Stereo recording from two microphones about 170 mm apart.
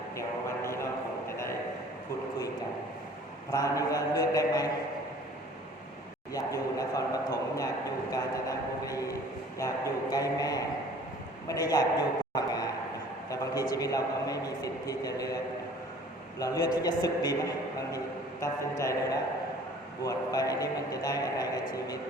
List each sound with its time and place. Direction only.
0.2 s speech: 15° left (ahead or behind)
3.5 s mantra: 20° left (ahead or behind)
6.3 s a sound: 20° left (ahead or behind)
11.4 s a man's voice: 20° left (ahead or behind)
12.3 s a sound: 20° left (ahead or behind)
13.3 s a man's voice: 20° left (ahead or behind)
16.4 s a man's voice: 20° left (ahead or behind)
20.0 s a man's voice: 20° left (ahead or behind)